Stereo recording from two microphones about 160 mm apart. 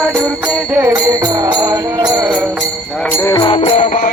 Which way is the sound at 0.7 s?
20° right (ahead or behind).